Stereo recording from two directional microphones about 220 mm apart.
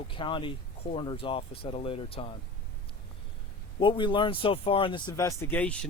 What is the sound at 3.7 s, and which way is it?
Speech, 20° left (ahead or behind).